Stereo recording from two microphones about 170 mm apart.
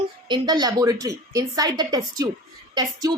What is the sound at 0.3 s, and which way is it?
A child's voice, 25° right (ahead or behind).